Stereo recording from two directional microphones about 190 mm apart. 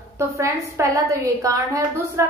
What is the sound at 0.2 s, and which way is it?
A woman's voice, 15° right (ahead or behind).